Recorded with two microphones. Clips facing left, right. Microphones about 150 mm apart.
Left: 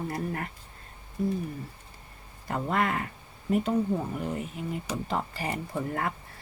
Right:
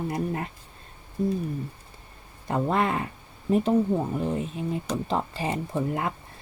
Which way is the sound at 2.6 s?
30° right (ahead or behind).